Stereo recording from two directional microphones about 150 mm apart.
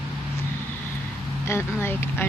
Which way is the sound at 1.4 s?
15° left (ahead or behind).